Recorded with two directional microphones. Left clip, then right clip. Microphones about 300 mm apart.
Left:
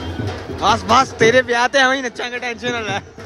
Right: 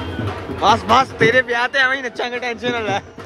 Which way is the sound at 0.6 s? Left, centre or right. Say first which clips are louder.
Even; centre.